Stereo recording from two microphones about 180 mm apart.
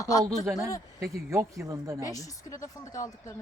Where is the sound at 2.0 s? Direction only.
20° left (ahead or behind).